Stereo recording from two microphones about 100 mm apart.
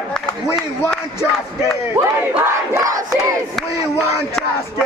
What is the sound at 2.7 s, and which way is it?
Crowd, 35° right (ahead or behind).